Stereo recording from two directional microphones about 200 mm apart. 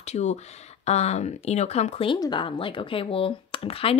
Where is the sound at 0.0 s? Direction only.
35° left (ahead or behind).